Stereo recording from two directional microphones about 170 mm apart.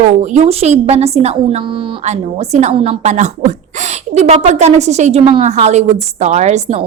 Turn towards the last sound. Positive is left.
turn(degrees=-40)  # may be behind; listen again after turning